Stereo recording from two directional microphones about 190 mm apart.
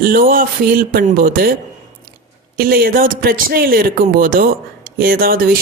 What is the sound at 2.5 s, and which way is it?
Speech, 50° right (ahead or behind).